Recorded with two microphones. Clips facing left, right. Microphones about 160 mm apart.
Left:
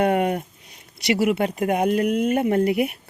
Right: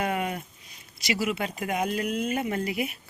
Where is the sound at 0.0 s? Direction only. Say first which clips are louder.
Left 9 dB; 60° left (ahead or behind).